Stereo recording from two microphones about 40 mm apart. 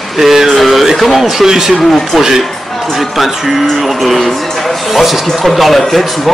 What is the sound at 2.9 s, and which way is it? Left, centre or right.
Speech, centre.